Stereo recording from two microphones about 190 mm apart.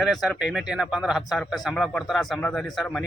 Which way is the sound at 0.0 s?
Centre (ahead or behind).